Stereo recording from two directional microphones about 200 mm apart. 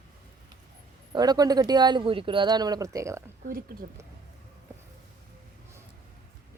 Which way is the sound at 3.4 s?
45° right (ahead or behind).